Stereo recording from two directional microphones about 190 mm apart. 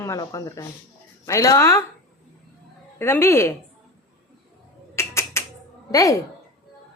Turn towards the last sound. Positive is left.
turn(degrees=15)  # may be behind; listen again after turning